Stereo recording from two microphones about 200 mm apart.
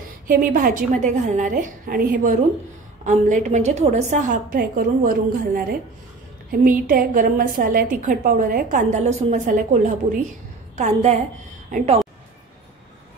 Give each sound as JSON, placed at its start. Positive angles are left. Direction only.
{"t": 0.3, "sound": "a woman's voice", "side_deg": -45}
{"t": 10.8, "sound": "a woman's voice", "side_deg": -35}